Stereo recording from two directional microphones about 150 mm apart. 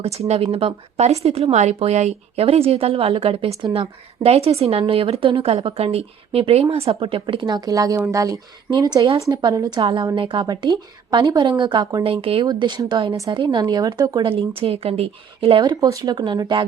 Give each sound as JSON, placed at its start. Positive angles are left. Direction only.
{"t": 0.0, "sound": "speech", "side_deg": -45}
{"t": 12.0, "sound": "speech", "side_deg": -40}
{"t": 15.7, "sound": "speech", "side_deg": -25}